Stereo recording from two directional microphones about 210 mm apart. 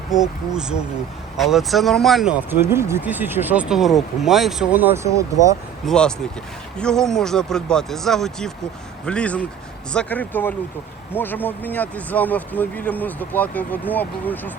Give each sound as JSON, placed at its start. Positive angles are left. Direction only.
{"t": 0.1, "sound": "speech", "side_deg": -5}
{"t": 5.8, "sound": "speech", "side_deg": 5}